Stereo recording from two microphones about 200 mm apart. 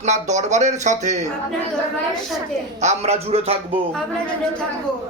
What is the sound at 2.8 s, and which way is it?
Speech, 35° right (ahead or behind).